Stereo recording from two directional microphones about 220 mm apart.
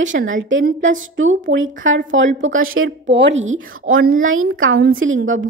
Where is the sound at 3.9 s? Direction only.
65° right (ahead or behind).